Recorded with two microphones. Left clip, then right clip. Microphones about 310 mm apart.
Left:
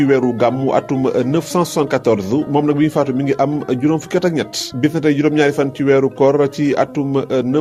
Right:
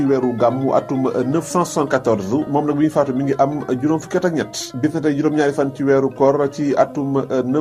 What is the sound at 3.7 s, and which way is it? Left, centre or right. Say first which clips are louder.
Speech: left 2 dB; left.